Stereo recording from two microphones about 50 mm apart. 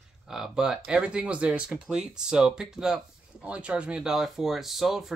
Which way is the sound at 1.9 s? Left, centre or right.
Centre.